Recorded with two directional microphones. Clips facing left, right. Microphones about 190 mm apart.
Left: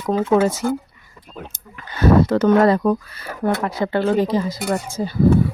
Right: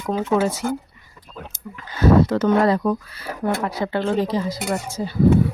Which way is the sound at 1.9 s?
60° left (ahead or behind).